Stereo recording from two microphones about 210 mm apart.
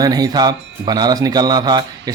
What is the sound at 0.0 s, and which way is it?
Speech, 20° right (ahead or behind).